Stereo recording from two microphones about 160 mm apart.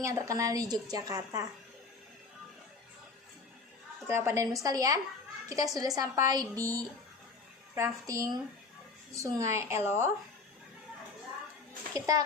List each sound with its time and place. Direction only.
0.0 s a woman's voice: 20° right (ahead or behind)
4.0 s a woman's voice: 15° right (ahead or behind)
11.9 s a woman's voice: 20° right (ahead or behind)